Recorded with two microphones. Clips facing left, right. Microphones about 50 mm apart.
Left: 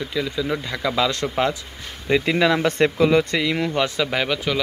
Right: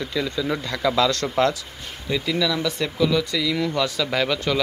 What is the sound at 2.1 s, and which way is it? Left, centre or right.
Speech, left.